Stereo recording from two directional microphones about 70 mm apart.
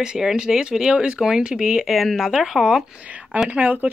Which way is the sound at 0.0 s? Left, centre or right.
Centre.